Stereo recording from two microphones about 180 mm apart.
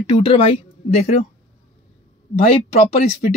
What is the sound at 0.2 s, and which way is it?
Speech, 30° left (ahead or behind).